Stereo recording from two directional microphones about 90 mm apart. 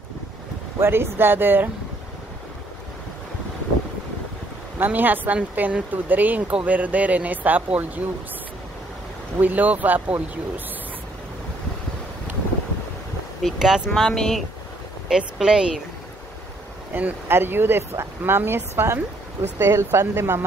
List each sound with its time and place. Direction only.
0.7 s speech: 30° right (ahead or behind)
4.7 s speech: 20° right (ahead or behind)
9.4 s speech: 20° right (ahead or behind)
13.4 s speech: centre (ahead or behind)
15.0 s speech: 5° right (ahead or behind)
16.9 s speech: 25° right (ahead or behind)